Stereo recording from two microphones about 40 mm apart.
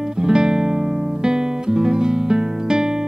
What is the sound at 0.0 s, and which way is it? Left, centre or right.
Music, centre.